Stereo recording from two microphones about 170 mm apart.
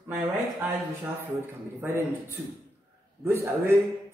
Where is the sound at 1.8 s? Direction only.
15° right (ahead or behind).